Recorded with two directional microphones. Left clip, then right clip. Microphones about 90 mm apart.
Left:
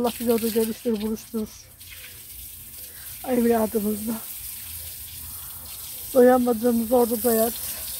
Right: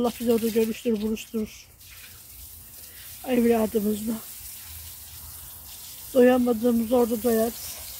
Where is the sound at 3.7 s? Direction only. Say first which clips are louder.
Even; 15° right (ahead or behind).